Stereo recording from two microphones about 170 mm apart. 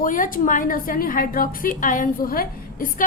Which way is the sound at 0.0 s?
55° left (ahead or behind).